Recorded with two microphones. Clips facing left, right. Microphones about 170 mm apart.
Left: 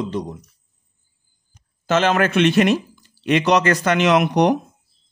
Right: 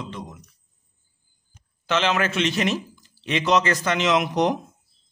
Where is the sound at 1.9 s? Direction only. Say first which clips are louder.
Left 5 dB; 50° left (ahead or behind); by 4.6 s 65° left (ahead or behind).